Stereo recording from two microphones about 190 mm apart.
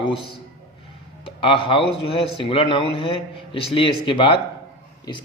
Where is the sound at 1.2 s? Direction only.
25° left (ahead or behind).